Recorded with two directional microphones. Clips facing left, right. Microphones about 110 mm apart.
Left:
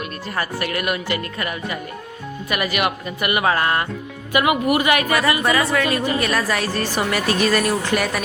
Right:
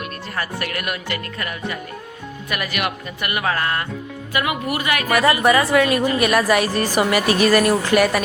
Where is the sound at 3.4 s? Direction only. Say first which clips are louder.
Left 2 dB; 20° left (ahead or behind).